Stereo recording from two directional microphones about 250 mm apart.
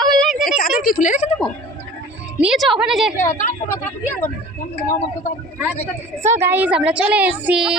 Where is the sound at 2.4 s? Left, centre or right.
Centre.